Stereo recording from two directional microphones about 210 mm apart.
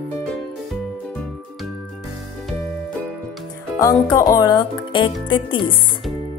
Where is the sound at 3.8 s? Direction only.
15° left (ahead or behind).